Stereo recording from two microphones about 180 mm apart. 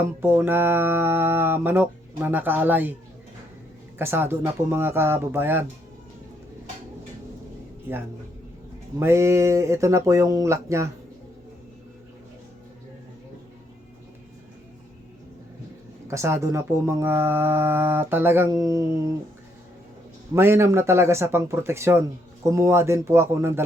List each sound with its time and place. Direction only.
0.2 s speech: 15° right (ahead or behind)
3.9 s speech: 15° right (ahead or behind)
9.0 s speech: 15° right (ahead or behind)
16.0 s speech: 15° right (ahead or behind)
20.3 s speech: 15° right (ahead or behind)